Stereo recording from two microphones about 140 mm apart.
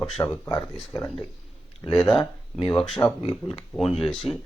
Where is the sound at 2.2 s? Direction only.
40° left (ahead or behind).